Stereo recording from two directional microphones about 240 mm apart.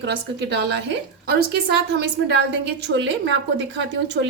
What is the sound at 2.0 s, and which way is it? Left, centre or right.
A woman's voice, right.